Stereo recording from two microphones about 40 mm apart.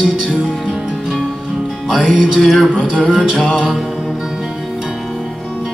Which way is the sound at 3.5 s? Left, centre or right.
Centre.